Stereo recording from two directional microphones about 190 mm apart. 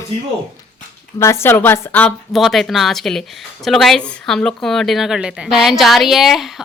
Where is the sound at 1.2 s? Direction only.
15° left (ahead or behind).